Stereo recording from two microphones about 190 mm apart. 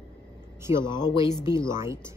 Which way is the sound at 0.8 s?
25° left (ahead or behind).